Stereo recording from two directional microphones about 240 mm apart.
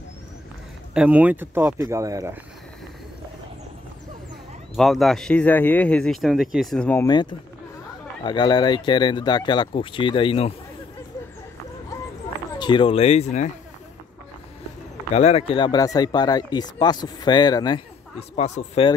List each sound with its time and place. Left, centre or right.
0.9 s speech: centre
4.7 s speech: centre; by 10.5 s left
12.5 s speech: centre
15.1 s speech: left
18.3 s speech: left